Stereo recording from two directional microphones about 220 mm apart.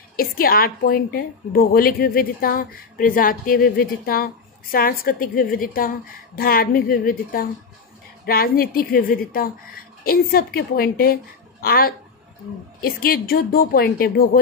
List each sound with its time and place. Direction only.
0.1 s a woman's voice: 40° left (ahead or behind)